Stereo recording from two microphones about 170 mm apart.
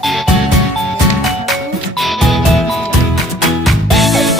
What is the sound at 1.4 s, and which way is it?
Music, centre (ahead or behind).